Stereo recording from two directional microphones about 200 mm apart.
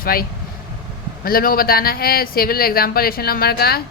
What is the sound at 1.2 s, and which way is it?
Speech, 45° left (ahead or behind).